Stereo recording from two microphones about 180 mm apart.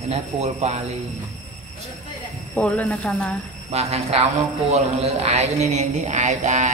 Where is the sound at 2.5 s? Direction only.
10° left (ahead or behind).